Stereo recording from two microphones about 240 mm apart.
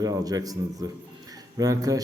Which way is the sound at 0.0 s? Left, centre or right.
Centre.